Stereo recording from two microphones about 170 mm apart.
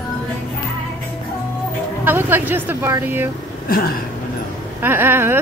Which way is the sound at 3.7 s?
60° left (ahead or behind).